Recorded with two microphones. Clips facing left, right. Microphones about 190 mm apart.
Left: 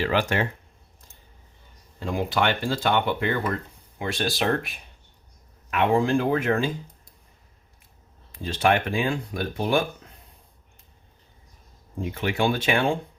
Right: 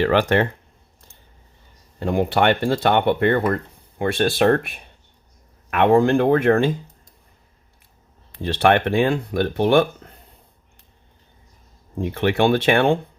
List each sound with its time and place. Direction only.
0.0 s speech: 60° right (ahead or behind)
2.0 s speech: 60° right (ahead or behind)
8.3 s speech: 65° right (ahead or behind)
11.9 s speech: 65° right (ahead or behind)